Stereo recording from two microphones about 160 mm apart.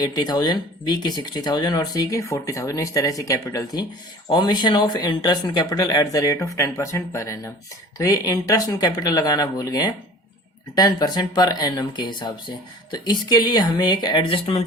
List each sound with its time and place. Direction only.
0.0 s speech: 25° left (ahead or behind)